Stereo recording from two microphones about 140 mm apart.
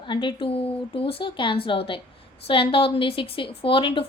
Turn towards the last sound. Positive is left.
turn(degrees=40)  # may be behind; listen again after turning